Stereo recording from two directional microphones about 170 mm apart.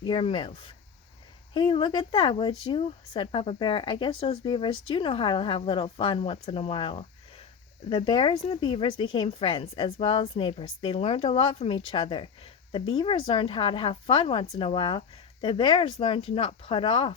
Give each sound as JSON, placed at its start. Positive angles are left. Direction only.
{"t": 0.0, "sound": "speech", "side_deg": 30}